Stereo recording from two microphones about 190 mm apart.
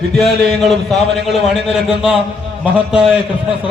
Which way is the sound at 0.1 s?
Centre (ahead or behind).